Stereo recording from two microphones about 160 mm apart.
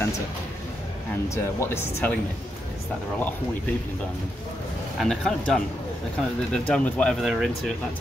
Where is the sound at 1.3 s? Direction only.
15° left (ahead or behind).